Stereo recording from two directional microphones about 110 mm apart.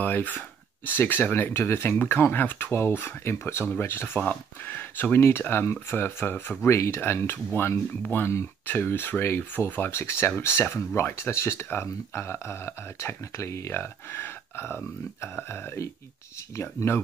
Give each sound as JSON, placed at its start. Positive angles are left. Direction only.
{"t": 0.0, "sound": "speech", "side_deg": 15}